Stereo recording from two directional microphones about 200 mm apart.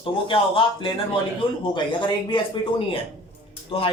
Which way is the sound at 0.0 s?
25° left (ahead or behind).